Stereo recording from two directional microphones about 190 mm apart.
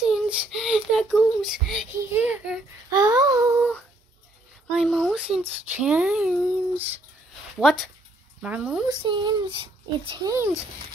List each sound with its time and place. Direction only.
0.0 s a child's voice: 5° right (ahead or behind)
2.9 s child singing: 20° right (ahead or behind)
4.6 s speech: 5° left (ahead or behind)
8.8 s speech: 25° right (ahead or behind)